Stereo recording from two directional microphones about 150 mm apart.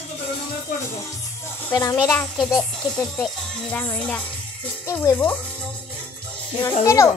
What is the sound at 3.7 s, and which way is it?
Speech, 10° left (ahead or behind).